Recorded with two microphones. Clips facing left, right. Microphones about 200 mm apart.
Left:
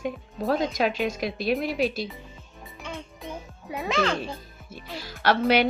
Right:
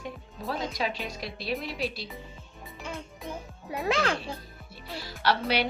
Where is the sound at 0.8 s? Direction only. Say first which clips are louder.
Left 4 dB; 60° left (ahead or behind).